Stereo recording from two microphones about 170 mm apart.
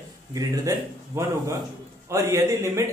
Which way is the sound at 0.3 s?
20° right (ahead or behind).